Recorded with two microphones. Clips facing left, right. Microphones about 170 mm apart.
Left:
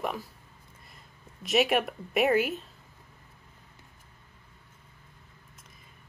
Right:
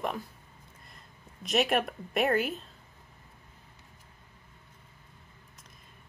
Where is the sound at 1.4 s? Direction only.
Centre (ahead or behind).